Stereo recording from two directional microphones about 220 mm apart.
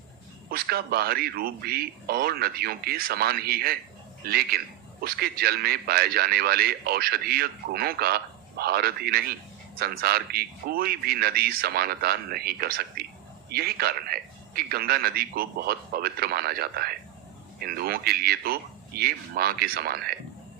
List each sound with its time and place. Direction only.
0.5 s a man's voice: 45° right (ahead or behind)